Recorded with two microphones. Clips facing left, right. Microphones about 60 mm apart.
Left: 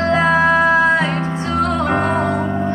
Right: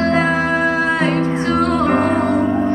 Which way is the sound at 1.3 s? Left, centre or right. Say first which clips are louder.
Right 2 dB; right.